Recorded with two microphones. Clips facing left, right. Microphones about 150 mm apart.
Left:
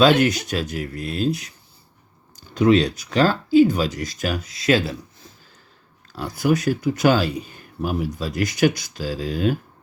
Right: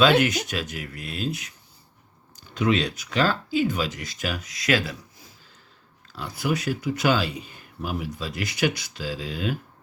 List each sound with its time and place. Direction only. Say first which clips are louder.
0.0 s speech: left 3 dB; 35° left (ahead or behind)
6.1 s speech: left 6 dB; 45° left (ahead or behind)